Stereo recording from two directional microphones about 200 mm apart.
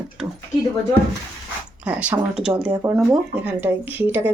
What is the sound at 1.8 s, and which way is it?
Speech, 5° right (ahead or behind).